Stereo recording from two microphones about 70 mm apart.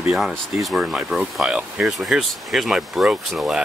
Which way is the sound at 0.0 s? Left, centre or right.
Centre.